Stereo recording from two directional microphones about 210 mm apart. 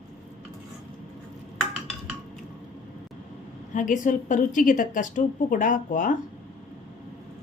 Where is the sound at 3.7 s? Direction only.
40° left (ahead or behind).